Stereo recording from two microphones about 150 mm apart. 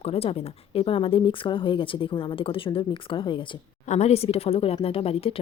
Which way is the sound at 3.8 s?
50° left (ahead or behind).